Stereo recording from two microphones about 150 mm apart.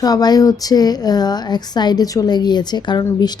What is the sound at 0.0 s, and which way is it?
Speech, 25° left (ahead or behind).